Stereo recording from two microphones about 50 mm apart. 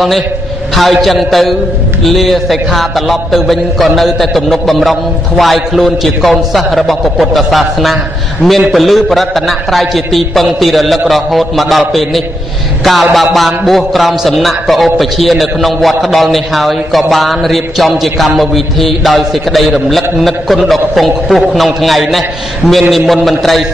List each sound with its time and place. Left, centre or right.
0.7 s a man's voice: centre